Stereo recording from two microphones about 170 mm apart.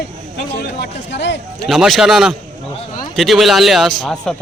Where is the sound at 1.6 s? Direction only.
Centre (ahead or behind).